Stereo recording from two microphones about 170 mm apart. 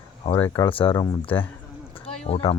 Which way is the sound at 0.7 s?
30° left (ahead or behind).